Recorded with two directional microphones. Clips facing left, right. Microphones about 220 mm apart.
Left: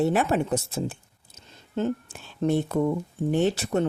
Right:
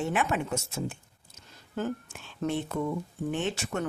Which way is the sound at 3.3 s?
35° left (ahead or behind).